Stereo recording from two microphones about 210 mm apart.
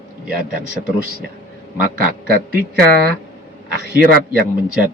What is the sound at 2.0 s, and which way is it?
Speech, 45° right (ahead or behind).